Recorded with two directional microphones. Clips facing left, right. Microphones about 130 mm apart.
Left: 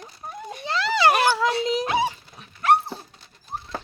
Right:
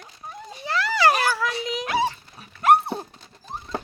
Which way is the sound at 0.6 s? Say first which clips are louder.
Even; 20° left (ahead or behind).